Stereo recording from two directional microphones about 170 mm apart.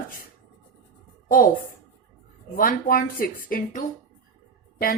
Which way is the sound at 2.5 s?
55° left (ahead or behind).